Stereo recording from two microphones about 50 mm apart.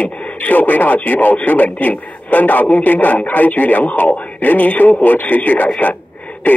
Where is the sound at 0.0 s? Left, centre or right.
Left.